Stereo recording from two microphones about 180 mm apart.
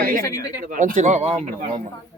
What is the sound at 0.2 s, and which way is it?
Speech, 20° left (ahead or behind).